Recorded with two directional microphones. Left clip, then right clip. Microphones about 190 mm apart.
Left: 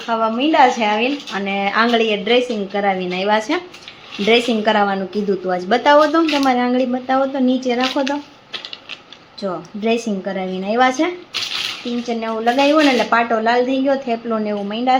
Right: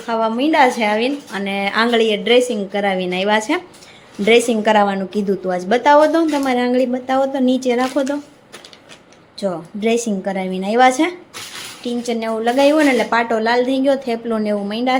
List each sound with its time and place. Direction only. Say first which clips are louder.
0.1 s a woman's voice: even; 20° right (ahead or behind)
9.4 s a woman's voice: right 2 dB; 20° right (ahead or behind)